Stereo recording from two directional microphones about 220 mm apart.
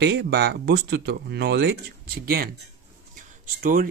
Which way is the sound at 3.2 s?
40° right (ahead or behind).